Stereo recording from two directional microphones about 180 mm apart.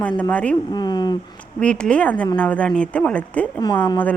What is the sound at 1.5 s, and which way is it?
A woman's voice, 5° left (ahead or behind).